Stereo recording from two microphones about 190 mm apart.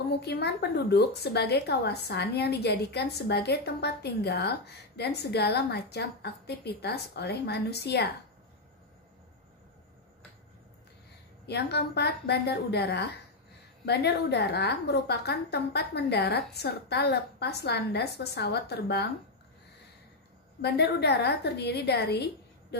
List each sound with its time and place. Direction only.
0.2 s a woman's voice: 60° left (ahead or behind)
11.4 s a woman's voice: 60° left (ahead or behind)
20.6 s a woman's voice: 60° left (ahead or behind)